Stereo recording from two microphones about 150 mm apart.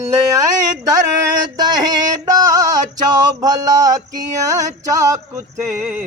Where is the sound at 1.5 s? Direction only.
25° right (ahead or behind).